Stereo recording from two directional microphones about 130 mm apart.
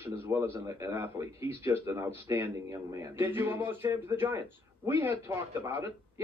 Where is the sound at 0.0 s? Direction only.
15° right (ahead or behind).